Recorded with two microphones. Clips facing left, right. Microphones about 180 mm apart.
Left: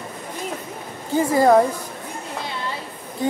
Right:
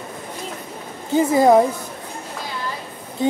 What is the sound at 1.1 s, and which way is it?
Speech, 20° right (ahead or behind).